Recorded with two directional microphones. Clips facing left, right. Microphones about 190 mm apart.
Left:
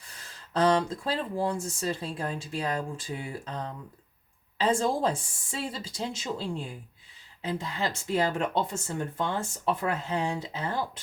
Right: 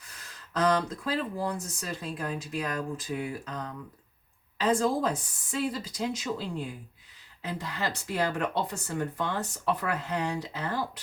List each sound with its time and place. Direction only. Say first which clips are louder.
0.1 s speech: left 3 dB; 30° left (ahead or behind)